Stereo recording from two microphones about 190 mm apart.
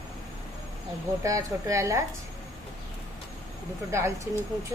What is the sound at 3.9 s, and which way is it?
Speech, 15° right (ahead or behind).